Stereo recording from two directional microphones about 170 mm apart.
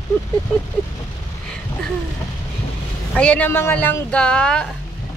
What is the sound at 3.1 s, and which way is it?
Speech, 5° left (ahead or behind).